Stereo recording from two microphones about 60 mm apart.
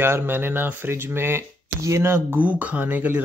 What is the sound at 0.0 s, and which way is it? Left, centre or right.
Speech, right.